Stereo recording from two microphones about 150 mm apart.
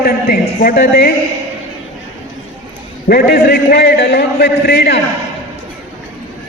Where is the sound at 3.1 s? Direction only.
90° left.